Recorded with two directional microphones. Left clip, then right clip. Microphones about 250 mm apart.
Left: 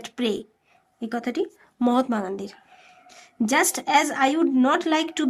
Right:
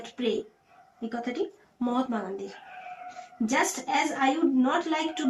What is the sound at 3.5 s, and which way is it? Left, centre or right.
A woman's voice, left.